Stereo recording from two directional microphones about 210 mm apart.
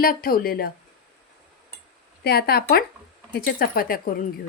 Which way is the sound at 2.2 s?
50° left (ahead or behind).